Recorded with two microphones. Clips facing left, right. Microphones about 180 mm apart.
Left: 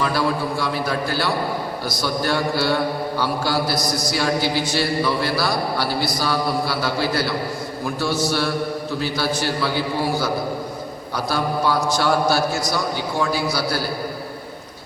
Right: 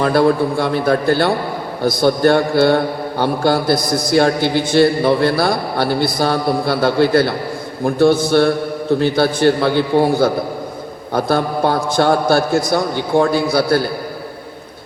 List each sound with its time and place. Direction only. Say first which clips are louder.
0.0 s a man's voice: right 8 dB; 55° right (ahead or behind)